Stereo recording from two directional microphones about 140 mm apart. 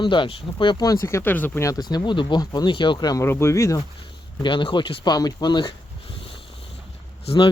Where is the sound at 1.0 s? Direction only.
15° left (ahead or behind).